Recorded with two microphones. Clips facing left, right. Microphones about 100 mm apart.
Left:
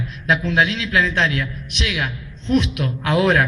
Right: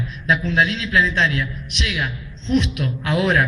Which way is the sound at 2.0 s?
45° left (ahead or behind).